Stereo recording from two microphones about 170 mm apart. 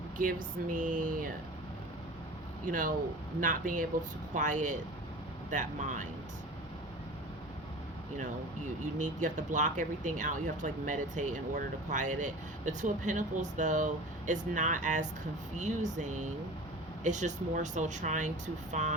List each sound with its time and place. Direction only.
0.7 s speech: 50° right (ahead or behind)
2.6 s speech: 50° right (ahead or behind)
8.2 s speech: 45° right (ahead or behind)